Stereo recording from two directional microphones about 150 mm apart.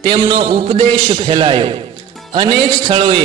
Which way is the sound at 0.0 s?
35° right (ahead or behind).